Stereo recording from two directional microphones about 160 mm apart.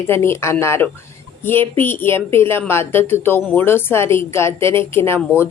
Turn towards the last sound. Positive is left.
turn(degrees=15)  # may be behind; listen again after turning